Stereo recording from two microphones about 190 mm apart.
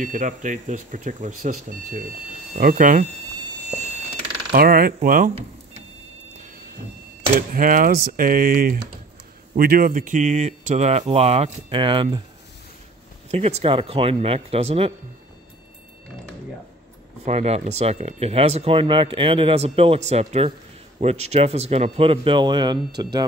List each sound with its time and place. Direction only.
0.0 s speech: 45° right (ahead or behind)
4.5 s speech: 50° right (ahead or behind)
7.3 s speech: 45° right (ahead or behind); by 12.2 s 25° right (ahead or behind)
13.3 s speech: 35° right (ahead or behind)
17.2 s speech: 35° right (ahead or behind)